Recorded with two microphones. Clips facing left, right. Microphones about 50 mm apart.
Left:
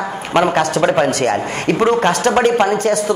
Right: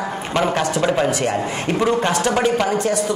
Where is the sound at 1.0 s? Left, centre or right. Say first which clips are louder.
Left 3 dB; left.